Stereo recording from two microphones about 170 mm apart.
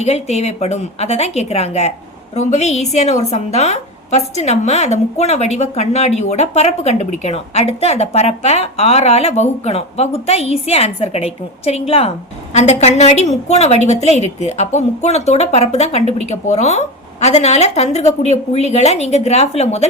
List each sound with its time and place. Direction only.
0.0 s a woman's voice: 40° left (ahead or behind)